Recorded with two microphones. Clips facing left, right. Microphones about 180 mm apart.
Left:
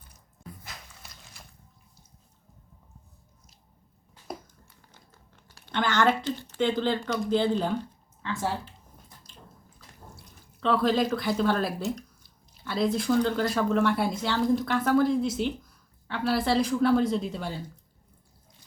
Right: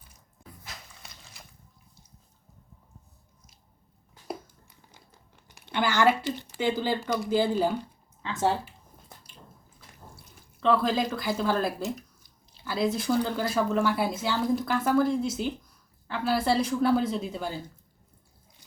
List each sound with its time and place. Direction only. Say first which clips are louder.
4.9 s crumpling: even; 15° right (ahead or behind)
8.2 s speech: right 4 dB; 20° right (ahead or behind)
10.6 s speech: even; centre (ahead or behind)